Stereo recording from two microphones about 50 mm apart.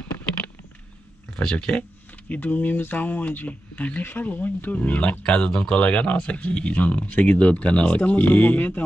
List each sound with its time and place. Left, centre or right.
1.3 s speech: left
4.0 s speech: left